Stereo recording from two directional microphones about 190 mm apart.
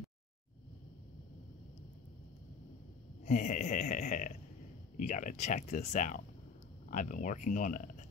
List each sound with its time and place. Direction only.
3.3 s speech: 40° left (ahead or behind)